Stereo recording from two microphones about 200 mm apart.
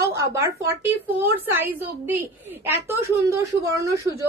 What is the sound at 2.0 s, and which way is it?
A woman's voice, 10° right (ahead or behind).